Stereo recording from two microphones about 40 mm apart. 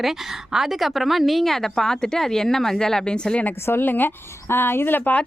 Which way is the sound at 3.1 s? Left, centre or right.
Left.